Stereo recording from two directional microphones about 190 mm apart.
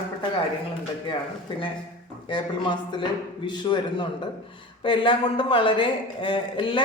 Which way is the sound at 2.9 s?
25° left (ahead or behind).